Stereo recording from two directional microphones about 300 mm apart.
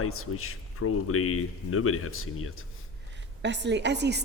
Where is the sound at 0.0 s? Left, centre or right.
Left.